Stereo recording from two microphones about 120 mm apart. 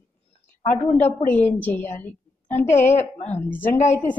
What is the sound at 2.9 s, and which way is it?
Speech, 75° left (ahead or behind).